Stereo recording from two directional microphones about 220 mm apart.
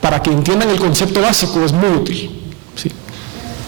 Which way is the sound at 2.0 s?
10° right (ahead or behind).